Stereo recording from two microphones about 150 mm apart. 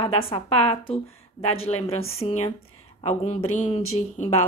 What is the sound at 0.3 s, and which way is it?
Speech, 40° left (ahead or behind).